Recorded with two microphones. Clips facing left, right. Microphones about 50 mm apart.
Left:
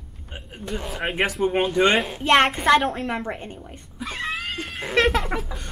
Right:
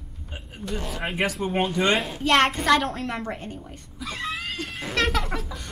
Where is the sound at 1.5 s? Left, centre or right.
Left.